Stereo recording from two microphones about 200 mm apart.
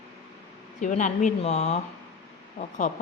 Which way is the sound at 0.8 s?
40° left (ahead or behind).